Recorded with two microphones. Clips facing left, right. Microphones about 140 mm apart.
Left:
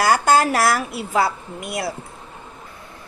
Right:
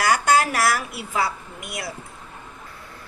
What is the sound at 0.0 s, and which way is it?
A woman's voice, 30° left (ahead or behind).